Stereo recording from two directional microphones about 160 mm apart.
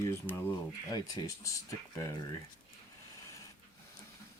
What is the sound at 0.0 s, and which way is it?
Speech, 15° left (ahead or behind).